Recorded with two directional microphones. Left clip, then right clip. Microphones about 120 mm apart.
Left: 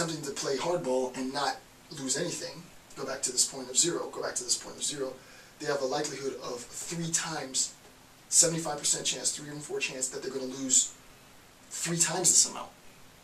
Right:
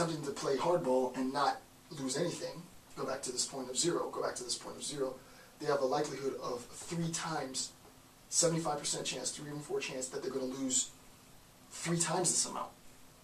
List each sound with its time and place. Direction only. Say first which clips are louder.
0.0 s speech: left 2 dB; 5° left (ahead or behind)
11.8 s speech: left 4 dB; 5° left (ahead or behind)